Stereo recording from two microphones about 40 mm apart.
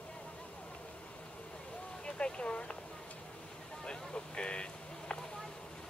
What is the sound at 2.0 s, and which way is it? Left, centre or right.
Speech, left.